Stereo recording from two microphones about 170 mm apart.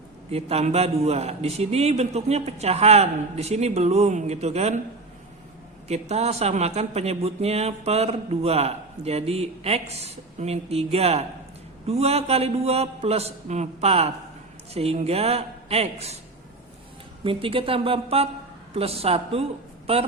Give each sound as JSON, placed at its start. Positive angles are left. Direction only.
{"t": 0.3, "sound": "speech", "side_deg": -35}
{"t": 5.9, "sound": "speech", "side_deg": -40}
{"t": 17.2, "sound": "speech", "side_deg": -30}